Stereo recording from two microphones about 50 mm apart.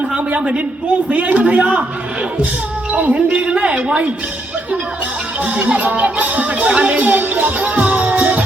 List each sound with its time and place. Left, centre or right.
0.3 s speech: right
2.9 s speech: right
5.5 s speech: right